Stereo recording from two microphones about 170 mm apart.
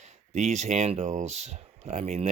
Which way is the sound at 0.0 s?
40° right (ahead or behind).